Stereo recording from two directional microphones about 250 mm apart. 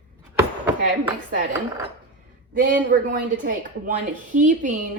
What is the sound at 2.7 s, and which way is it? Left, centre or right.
A woman's voice, right.